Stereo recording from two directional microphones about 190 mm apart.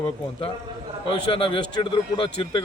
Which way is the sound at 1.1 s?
25° left (ahead or behind).